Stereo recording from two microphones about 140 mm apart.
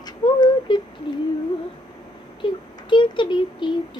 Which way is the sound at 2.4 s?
35° left (ahead or behind).